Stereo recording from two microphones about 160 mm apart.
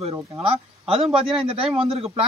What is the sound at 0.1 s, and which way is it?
Speech, 35° right (ahead or behind).